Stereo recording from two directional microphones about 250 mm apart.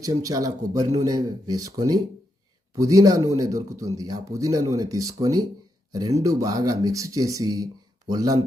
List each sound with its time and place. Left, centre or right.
0.0 s speech: centre